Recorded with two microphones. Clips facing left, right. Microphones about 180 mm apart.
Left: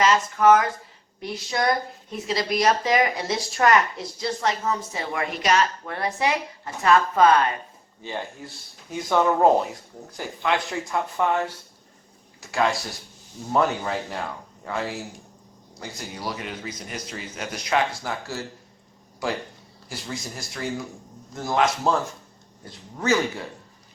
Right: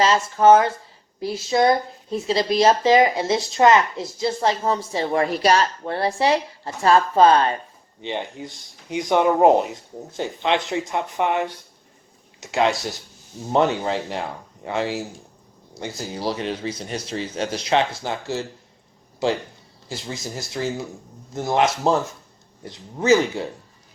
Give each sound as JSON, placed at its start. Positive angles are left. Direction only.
{"t": 0.0, "sound": "a woman's voice", "side_deg": -30}
{"t": 8.0, "sound": "a woman's voice", "side_deg": -20}
{"t": 20.3, "sound": "a woman's voice", "side_deg": -25}